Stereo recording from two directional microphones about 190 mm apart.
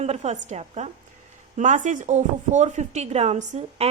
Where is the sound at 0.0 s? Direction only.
35° right (ahead or behind).